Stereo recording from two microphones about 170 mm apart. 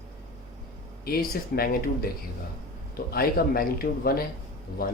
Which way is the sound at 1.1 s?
60° left (ahead or behind).